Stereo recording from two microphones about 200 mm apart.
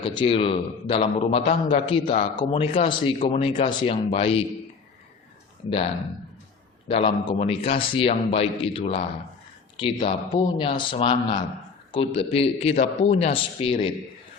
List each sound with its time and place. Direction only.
0.0 s a man's voice: 25° left (ahead or behind)
6.8 s a man's voice: 30° left (ahead or behind)